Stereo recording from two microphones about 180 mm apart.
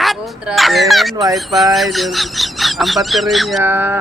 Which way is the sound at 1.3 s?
Centre (ahead or behind).